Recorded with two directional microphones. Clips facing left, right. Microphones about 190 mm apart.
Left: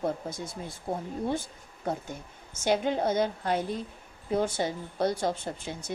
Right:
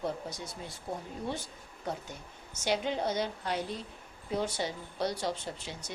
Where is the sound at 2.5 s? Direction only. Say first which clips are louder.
Left 5 dB; 50° left (ahead or behind).